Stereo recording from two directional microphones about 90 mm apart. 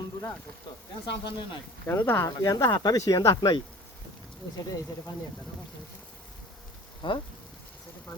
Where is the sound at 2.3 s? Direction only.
40° left (ahead or behind).